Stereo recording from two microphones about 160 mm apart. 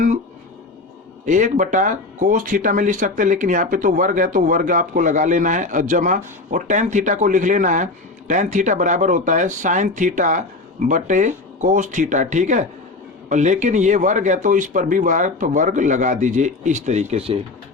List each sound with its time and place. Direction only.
1.2 s speech: 50° right (ahead or behind)